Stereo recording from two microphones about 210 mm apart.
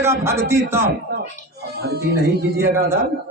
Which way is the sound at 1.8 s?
50° right (ahead or behind).